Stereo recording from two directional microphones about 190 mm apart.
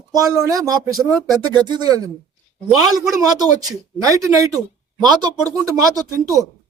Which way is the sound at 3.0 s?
20° right (ahead or behind).